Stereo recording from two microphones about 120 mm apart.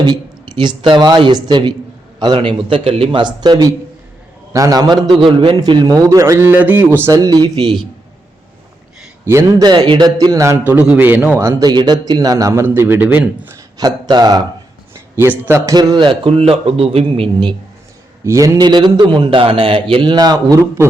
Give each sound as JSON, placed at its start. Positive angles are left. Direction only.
{"t": 0.0, "sound": "a man's voice", "side_deg": -40}
{"t": 7.1, "sound": "a man's voice", "side_deg": -30}
{"t": 9.2, "sound": "a man's voice", "side_deg": -20}
{"t": 9.6, "sound": "a man's voice", "side_deg": -40}
{"t": 10.7, "sound": "a man's voice", "side_deg": -15}
{"t": 11.6, "sound": "a man's voice", "side_deg": -35}
{"t": 13.7, "sound": "a man's voice", "side_deg": -35}
{"t": 15.1, "sound": "a man's voice", "side_deg": -20}
{"t": 18.3, "sound": "a man's voice", "side_deg": -30}